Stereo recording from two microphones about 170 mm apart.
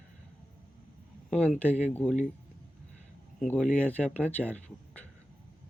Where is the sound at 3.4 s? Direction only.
5° left (ahead or behind).